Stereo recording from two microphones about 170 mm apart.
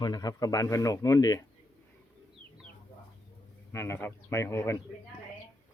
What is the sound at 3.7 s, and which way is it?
A man's voice, 15° left (ahead or behind).